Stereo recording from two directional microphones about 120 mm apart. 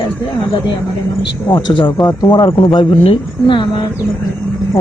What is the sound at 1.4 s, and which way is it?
Speech, 40° left (ahead or behind).